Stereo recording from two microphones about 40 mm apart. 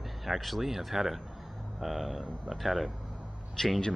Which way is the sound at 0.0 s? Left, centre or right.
Centre.